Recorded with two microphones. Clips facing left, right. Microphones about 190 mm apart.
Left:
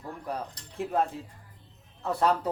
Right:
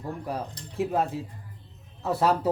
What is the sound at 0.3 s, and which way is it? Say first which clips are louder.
Speech: right 2 dB; 5° right (ahead or behind).